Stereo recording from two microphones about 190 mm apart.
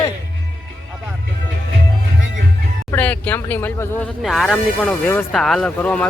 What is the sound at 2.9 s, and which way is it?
Speech, 10° left (ahead or behind).